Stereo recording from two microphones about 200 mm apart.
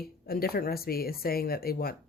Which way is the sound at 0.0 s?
50° left (ahead or behind).